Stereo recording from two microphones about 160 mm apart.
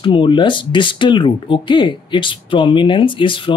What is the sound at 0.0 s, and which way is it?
Speech, 30° left (ahead or behind).